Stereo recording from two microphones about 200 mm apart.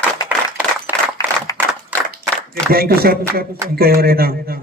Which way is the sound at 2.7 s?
50° right (ahead or behind).